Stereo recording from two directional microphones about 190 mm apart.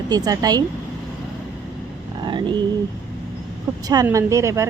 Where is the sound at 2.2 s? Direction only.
25° right (ahead or behind).